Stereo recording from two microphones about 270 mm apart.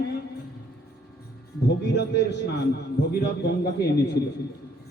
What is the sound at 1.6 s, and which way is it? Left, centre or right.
A man's voice, left.